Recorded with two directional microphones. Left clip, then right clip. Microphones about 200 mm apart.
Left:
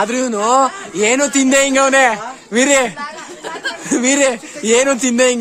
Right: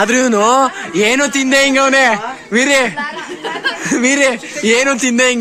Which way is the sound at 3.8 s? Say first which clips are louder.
Right 1 dB; 15° left (ahead or behind).